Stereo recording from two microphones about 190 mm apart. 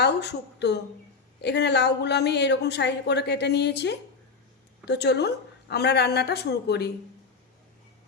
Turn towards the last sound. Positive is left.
turn(degrees=60)  # may be behind; listen again after turning